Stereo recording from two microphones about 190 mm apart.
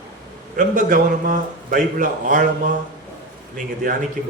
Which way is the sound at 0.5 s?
45° right (ahead or behind).